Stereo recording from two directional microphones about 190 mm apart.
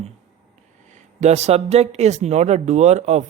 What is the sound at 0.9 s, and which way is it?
Speech, 35° right (ahead or behind).